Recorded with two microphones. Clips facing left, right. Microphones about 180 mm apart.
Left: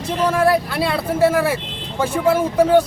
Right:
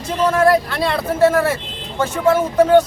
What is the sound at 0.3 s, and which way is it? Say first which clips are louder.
Speech: right 3 dB; 10° left (ahead or behind).